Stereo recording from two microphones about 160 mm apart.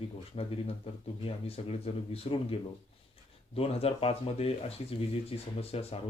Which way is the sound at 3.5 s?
40° left (ahead or behind).